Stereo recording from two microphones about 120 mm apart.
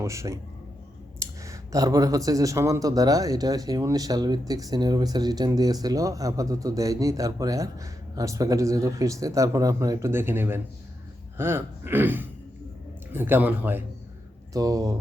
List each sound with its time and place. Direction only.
0.0 s speech: 25° right (ahead or behind)
14.5 s speech: 30° right (ahead or behind)